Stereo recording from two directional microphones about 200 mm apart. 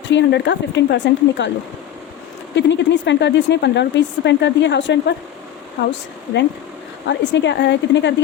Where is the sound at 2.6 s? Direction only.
60° left (ahead or behind).